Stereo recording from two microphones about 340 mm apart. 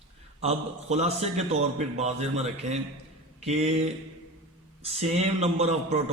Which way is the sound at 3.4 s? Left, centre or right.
Centre.